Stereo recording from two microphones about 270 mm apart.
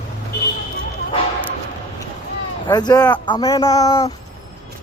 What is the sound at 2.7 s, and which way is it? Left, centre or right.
A man's voice, centre.